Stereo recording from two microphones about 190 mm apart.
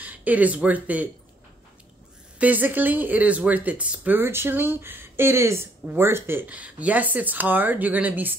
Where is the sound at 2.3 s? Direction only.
10° right (ahead or behind).